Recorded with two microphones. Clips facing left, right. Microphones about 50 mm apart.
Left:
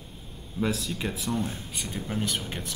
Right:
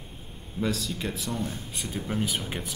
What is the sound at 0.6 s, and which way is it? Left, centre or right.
Speech, centre.